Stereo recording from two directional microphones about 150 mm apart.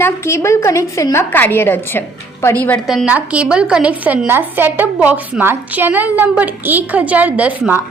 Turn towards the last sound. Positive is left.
turn(degrees=-10)  # may be behind; listen again after turning